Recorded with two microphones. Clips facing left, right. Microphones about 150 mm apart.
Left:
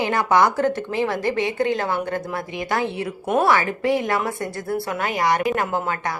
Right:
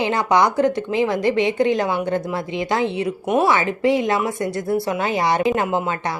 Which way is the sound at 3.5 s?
20° right (ahead or behind).